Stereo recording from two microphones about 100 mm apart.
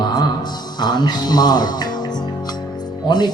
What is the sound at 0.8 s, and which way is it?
Music, 45° left (ahead or behind).